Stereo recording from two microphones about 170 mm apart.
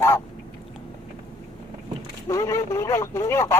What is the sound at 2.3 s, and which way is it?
Speech, 20° left (ahead or behind).